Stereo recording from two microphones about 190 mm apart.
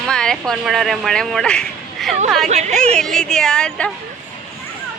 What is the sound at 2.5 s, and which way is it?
Speech, 35° right (ahead or behind).